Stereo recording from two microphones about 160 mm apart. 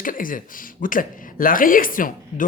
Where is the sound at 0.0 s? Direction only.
60° left (ahead or behind).